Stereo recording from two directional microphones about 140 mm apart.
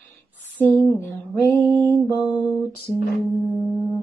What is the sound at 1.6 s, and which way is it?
Mantra, 15° left (ahead or behind).